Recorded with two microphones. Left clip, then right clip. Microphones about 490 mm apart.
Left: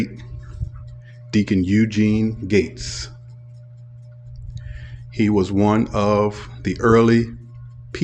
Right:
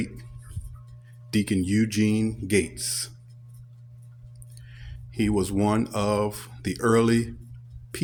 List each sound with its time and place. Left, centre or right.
1.3 s speech: right
4.5 s speech: right